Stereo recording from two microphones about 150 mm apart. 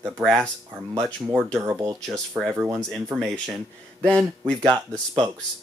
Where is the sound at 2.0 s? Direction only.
Centre (ahead or behind).